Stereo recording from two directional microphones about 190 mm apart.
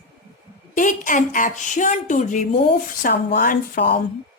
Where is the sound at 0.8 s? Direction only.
45° left (ahead or behind).